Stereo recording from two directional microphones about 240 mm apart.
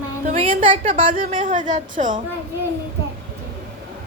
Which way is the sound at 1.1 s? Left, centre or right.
Right.